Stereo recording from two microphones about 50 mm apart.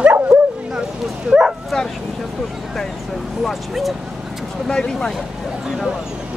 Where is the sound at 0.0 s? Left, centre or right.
Right.